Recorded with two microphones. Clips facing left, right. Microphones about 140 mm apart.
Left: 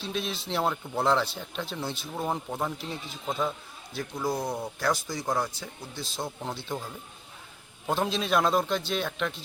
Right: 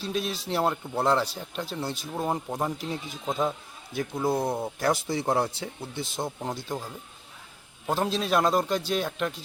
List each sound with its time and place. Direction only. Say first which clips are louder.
0.0 s speech: right 3 dB; 5° right (ahead or behind)